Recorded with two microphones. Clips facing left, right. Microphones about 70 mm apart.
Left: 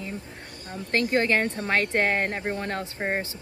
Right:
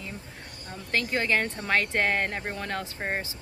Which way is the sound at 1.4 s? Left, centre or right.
Left.